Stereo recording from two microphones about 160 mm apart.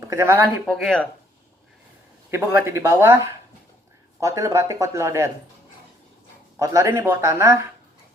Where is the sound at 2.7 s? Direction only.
15° right (ahead or behind).